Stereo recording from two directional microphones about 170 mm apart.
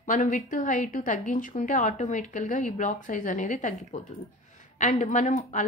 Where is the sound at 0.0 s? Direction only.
50° left (ahead or behind).